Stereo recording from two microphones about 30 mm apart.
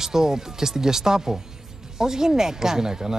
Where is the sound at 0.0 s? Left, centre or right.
Centre.